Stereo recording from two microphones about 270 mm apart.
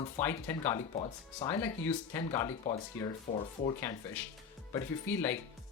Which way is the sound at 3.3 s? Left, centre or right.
Left.